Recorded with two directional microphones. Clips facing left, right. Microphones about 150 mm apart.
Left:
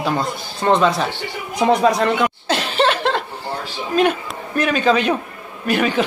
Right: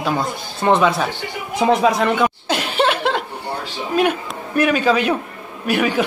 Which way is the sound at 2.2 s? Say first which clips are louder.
Right 1 dB; 10° right (ahead or behind).